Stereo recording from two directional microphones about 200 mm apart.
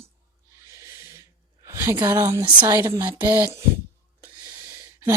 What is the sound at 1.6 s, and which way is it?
A woman's voice, 15° right (ahead or behind).